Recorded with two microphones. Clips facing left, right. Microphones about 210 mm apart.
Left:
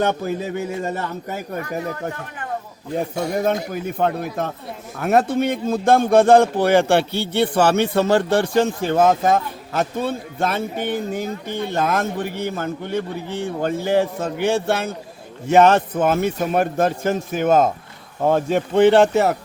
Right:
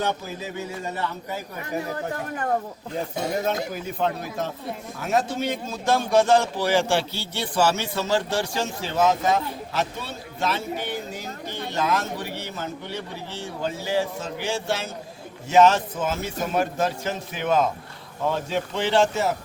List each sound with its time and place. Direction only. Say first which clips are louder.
0.0 s a man's voice: left 7 dB; 60° left (ahead or behind)
3.8 s a man's voice: left 7 dB; 55° left (ahead or behind)